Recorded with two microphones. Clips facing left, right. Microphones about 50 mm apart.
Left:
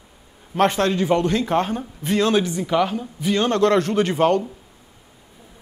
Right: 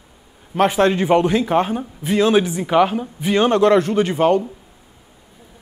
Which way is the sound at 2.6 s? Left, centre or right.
Right.